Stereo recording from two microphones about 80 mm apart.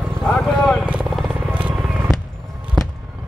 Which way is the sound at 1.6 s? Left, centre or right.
Centre.